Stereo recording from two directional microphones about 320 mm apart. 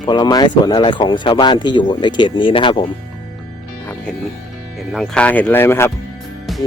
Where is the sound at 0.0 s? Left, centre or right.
Centre.